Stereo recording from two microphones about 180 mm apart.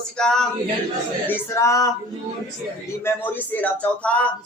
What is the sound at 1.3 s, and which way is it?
Speech, 15° left (ahead or behind).